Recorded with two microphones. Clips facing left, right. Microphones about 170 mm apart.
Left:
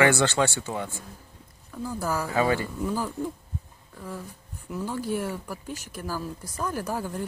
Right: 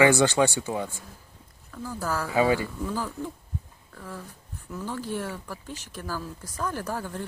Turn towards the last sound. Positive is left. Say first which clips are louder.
# left 2 dB
turn(degrees=10)  # may be behind; listen again after turning